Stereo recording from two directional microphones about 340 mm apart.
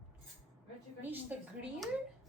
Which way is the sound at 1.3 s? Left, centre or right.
Centre.